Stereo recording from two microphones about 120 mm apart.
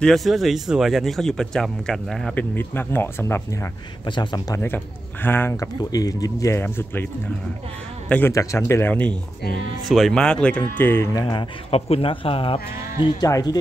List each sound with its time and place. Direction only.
0.0 s speech: centre (ahead or behind)
2.3 s speech: 15° left (ahead or behind)
4.0 s speech: 40° left (ahead or behind)
4.6 s speech: 15° left (ahead or behind)
5.6 s speech: 30° left (ahead or behind); by 7.1 s 15° left (ahead or behind)
8.3 s speech: 25° left (ahead or behind)
9.8 s speech: centre (ahead or behind)
10.6 s speech: 20° left (ahead or behind)
11.2 s speech: 50° left (ahead or behind)
13.0 s speech: 30° left (ahead or behind)